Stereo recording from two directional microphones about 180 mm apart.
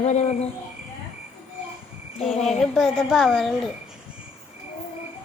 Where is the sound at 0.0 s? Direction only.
40° left (ahead or behind).